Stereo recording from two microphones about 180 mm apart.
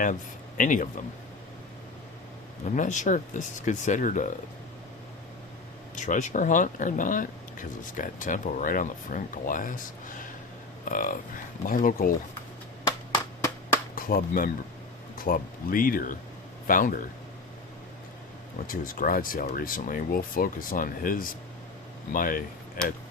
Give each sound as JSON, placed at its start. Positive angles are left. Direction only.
{"t": 0.0, "sound": "speech", "side_deg": 45}
{"t": 2.6, "sound": "speech", "side_deg": 45}
{"t": 6.1, "sound": "speech", "side_deg": 45}
{"t": 13.1, "sound": "clapping", "side_deg": 15}
{"t": 13.9, "sound": "speech", "side_deg": 50}
{"t": 18.7, "sound": "speech", "side_deg": 50}